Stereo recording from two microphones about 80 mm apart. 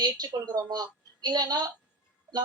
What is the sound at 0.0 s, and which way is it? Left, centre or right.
Speech, right.